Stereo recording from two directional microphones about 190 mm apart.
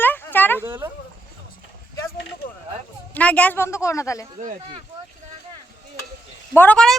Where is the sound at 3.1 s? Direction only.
5° left (ahead or behind).